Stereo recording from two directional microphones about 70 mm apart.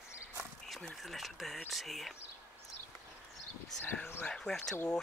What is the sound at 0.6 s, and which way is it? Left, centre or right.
Speech, centre.